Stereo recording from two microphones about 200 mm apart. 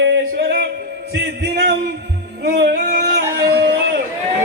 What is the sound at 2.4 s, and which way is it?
Music, 55° right (ahead or behind).